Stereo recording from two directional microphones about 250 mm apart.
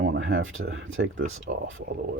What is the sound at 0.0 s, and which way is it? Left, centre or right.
Speech, right.